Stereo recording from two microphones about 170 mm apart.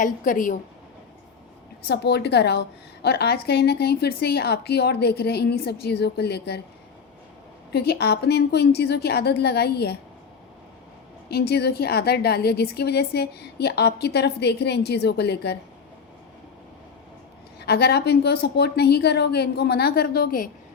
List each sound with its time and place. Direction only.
0.0 s a woman's voice: 50° left (ahead or behind)
1.9 s a woman's voice: 75° left (ahead or behind)
7.7 s a woman's voice: 70° left (ahead or behind)
11.3 s a woman's voice: 70° left (ahead or behind)
17.6 s a woman's voice: 70° left (ahead or behind)